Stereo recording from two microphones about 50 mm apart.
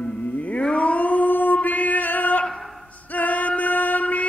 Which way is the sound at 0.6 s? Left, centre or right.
Left.